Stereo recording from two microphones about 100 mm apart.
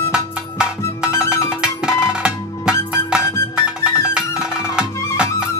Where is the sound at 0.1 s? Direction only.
10° right (ahead or behind).